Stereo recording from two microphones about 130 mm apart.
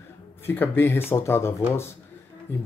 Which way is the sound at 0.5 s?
15° left (ahead or behind).